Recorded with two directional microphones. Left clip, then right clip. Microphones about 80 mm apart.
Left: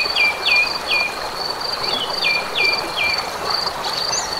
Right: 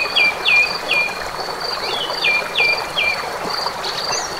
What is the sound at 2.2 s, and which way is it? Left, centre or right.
Cricket, right.